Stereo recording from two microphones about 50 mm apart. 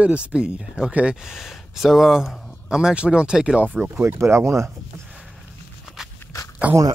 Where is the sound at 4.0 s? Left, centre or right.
Right.